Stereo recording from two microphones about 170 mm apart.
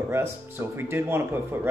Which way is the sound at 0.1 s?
15° right (ahead or behind).